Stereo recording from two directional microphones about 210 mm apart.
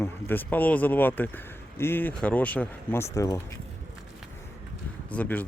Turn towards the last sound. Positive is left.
turn(degrees=5)  # may be behind; listen again after turning